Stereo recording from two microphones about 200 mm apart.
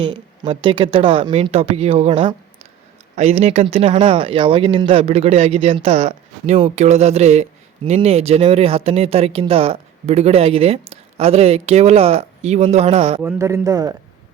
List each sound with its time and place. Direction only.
0.0 s speech: 25° right (ahead or behind)
13.2 s a man's voice: 15° right (ahead or behind)